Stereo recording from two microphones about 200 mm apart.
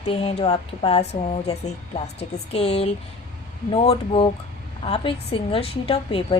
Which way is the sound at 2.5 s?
30° left (ahead or behind).